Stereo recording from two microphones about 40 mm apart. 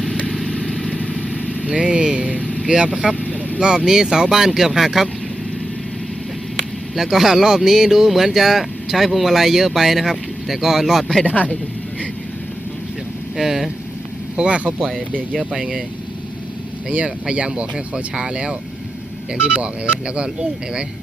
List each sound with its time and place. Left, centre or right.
0.3 s vehicle: centre
0.9 s vehicle: left
1.6 s vehicle: right
2.4 s vehicle: left
2.6 s speech: right
2.9 s speech: centre
3.2 s vehicle: left
3.6 s speech: centre
6.9 s speech: centre
11.3 s speech: left
13.3 s speech: centre
14.3 s speech: right
17.2 s speech: right